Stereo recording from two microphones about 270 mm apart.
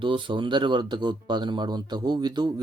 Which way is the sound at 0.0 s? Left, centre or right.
Centre.